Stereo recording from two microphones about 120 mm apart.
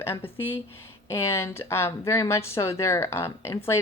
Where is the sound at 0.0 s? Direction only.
20° left (ahead or behind).